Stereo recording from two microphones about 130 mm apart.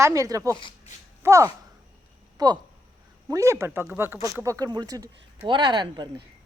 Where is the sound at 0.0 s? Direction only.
25° right (ahead or behind).